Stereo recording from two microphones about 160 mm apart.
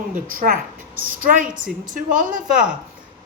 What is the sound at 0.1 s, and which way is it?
Speech, 60° right (ahead or behind).